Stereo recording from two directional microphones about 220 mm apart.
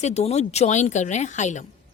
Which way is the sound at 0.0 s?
30° left (ahead or behind).